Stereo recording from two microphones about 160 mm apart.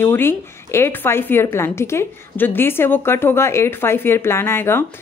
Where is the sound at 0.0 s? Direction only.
15° left (ahead or behind).